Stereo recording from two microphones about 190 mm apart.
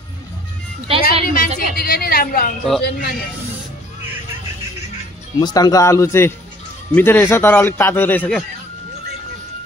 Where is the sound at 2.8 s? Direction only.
60° left (ahead or behind).